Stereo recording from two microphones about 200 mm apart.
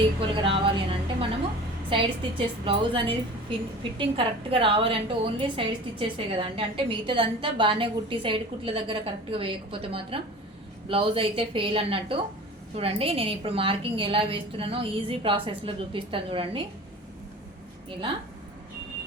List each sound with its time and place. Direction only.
0.2 s a woman's voice: 25° right (ahead or behind)